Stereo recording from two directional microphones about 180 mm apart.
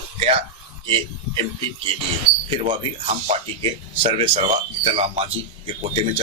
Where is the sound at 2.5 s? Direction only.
35° right (ahead or behind).